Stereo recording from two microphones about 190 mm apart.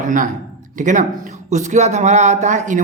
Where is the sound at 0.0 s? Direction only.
45° right (ahead or behind).